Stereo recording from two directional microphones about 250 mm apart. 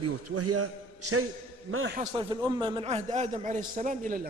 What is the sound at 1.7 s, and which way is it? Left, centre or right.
Speech, right.